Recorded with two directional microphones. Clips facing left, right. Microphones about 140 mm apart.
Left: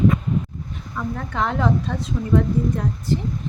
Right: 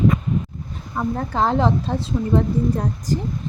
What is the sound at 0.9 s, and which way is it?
A woman's voice, 35° right (ahead or behind).